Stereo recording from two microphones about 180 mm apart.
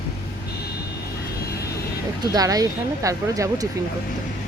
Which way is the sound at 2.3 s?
20° right (ahead or behind).